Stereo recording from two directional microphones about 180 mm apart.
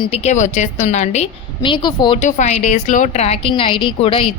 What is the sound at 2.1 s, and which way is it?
Speech, 40° left (ahead or behind).